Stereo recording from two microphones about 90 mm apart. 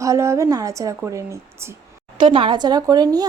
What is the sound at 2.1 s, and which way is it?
A woman's voice, 70° right (ahead or behind).